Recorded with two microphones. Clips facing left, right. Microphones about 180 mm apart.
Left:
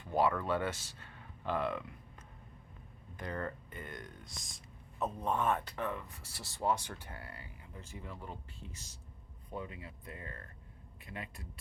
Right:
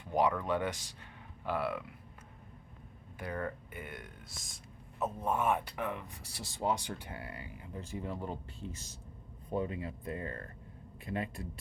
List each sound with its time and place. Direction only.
0.0 s speech: 15° right (ahead or behind)
3.2 s speech: 10° right (ahead or behind); by 11.6 s 30° right (ahead or behind)